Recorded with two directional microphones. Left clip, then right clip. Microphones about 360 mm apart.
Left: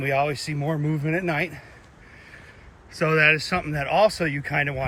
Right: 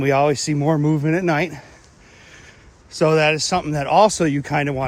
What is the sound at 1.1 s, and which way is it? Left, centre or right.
Speech, right.